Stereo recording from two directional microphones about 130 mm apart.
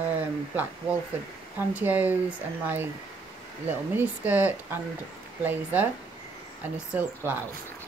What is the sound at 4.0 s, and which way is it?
Speech, 15° right (ahead or behind).